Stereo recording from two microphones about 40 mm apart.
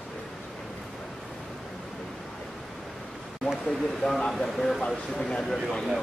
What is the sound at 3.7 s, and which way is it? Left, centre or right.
Speech, centre.